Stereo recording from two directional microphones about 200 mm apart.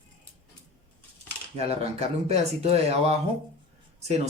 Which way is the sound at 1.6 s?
30° right (ahead or behind).